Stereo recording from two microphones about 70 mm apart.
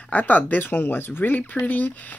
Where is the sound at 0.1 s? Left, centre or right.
Left.